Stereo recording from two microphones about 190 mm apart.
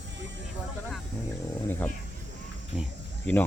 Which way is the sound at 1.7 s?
10° left (ahead or behind).